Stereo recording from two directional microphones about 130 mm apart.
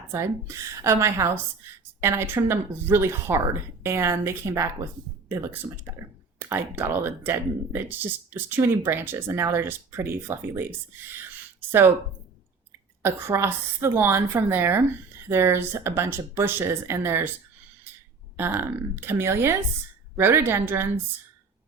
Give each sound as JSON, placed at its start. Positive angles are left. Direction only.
{"t": 0.1, "sound": "speech", "side_deg": -20}
{"t": 13.0, "sound": "speech", "side_deg": -20}
{"t": 18.3, "sound": "speech", "side_deg": -15}